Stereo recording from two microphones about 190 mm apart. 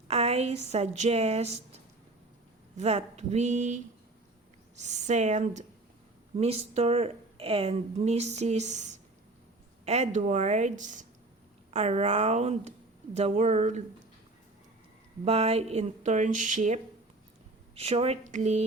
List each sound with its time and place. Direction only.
0.1 s a woman's voice: 35° right (ahead or behind)
4.8 s a woman's voice: 35° right (ahead or behind)
15.2 s a woman's voice: 35° right (ahead or behind)